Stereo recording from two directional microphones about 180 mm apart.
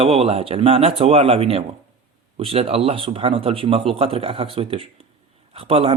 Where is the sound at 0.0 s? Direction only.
35° right (ahead or behind).